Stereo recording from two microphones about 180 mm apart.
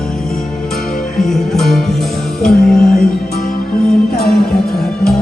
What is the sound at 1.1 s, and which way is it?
Music, centre (ahead or behind).